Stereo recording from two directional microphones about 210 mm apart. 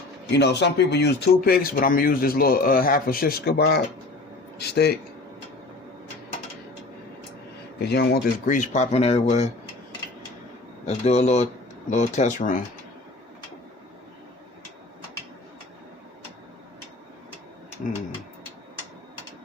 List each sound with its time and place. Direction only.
0.3 s speech: 55° left (ahead or behind)
7.8 s speech: 50° left (ahead or behind); by 9.5 s 30° left (ahead or behind)
10.8 s speech: 30° left (ahead or behind)